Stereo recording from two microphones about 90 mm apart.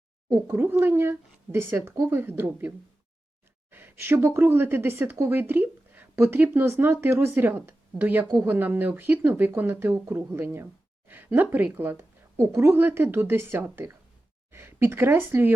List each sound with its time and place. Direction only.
0.3 s a woman's voice: 25° right (ahead or behind)